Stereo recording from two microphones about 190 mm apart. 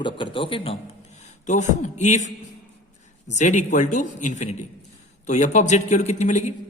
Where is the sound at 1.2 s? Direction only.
40° left (ahead or behind).